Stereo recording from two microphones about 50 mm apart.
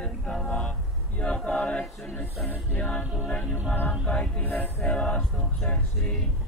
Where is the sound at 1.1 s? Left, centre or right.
Left.